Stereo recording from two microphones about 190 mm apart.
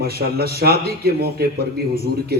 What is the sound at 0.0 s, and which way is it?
A man's voice, 55° right (ahead or behind).